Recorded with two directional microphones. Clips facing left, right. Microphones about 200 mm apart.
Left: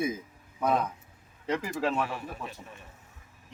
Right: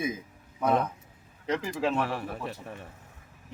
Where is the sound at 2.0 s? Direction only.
65° right (ahead or behind).